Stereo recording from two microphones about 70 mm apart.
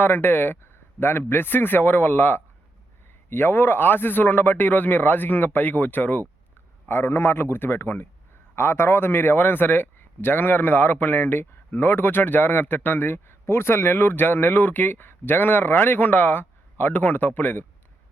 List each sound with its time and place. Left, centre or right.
0.0 s a man's voice: left